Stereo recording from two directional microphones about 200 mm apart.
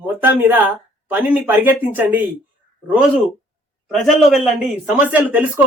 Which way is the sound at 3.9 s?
Centre (ahead or behind).